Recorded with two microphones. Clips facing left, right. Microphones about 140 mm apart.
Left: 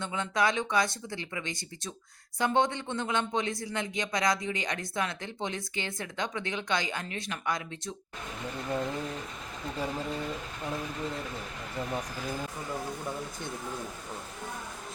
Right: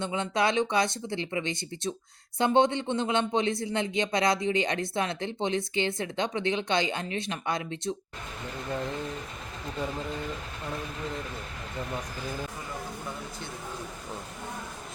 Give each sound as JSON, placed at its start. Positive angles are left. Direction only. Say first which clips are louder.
{"t": 0.0, "sound": "speech", "louder": "right 2 dB", "side_deg": -20}